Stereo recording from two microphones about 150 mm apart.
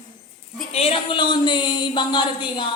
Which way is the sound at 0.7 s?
40° left (ahead or behind).